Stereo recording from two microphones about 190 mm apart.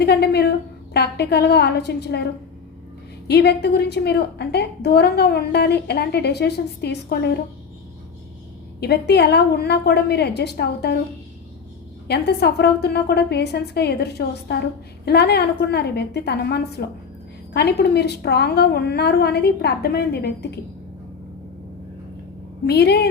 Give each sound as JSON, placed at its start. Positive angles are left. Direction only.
{"t": 0.0, "sound": "a sound", "side_deg": 60}
{"t": 0.9, "sound": "a woman's voice", "side_deg": 60}
{"t": 3.2, "sound": "a woman's voice", "side_deg": 60}
{"t": 8.8, "sound": "a woman's voice", "side_deg": 60}
{"t": 12.0, "sound": "a woman's voice", "side_deg": 60}
{"t": 22.6, "sound": "a woman's voice", "side_deg": 60}